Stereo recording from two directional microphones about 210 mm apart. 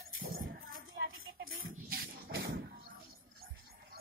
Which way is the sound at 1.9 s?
45° right (ahead or behind).